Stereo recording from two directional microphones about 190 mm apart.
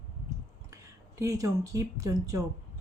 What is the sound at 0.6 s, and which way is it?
Speech, 15° right (ahead or behind).